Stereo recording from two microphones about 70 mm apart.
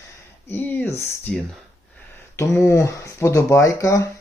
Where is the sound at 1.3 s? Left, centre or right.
Centre.